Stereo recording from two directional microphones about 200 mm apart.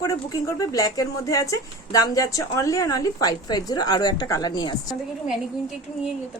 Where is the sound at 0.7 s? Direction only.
15° left (ahead or behind).